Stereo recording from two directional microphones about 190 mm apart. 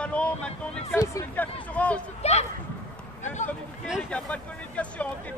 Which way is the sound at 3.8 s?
Centre (ahead or behind).